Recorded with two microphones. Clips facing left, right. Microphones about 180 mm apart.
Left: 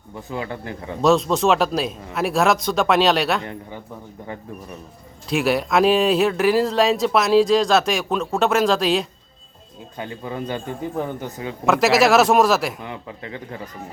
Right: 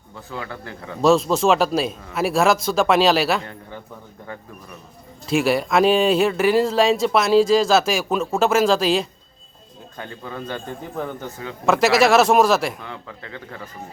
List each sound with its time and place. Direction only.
0.2 s a man's voice: 20° left (ahead or behind)
1.0 s speech: centre (ahead or behind)
5.3 s speech: centre (ahead or behind)
10.0 s a man's voice: 15° left (ahead or behind)
11.6 s speech: centre (ahead or behind)
12.8 s a man's voice: 20° left (ahead or behind)